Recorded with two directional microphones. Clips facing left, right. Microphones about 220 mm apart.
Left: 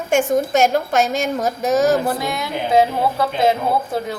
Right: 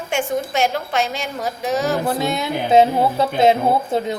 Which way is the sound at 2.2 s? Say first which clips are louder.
Right 2 dB; 25° right (ahead or behind).